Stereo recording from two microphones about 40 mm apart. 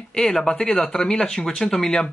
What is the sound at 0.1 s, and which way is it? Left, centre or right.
Speech, centre.